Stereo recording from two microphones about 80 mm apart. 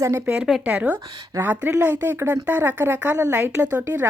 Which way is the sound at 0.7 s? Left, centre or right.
Centre.